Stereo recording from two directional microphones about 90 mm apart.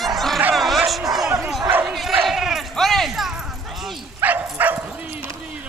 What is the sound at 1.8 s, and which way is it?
Bow-wow, centre (ahead or behind).